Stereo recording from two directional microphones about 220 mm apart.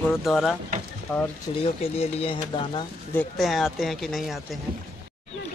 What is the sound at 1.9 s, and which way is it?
Speech, 25° left (ahead or behind).